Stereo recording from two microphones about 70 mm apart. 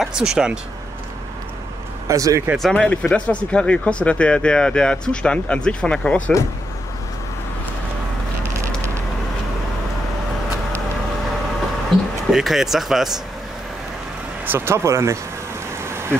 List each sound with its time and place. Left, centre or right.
0.0 s speech: centre
2.0 s speech: right
2.7 s speech: centre
12.3 s speech: centre
14.4 s speech: right
15.8 s a sound: right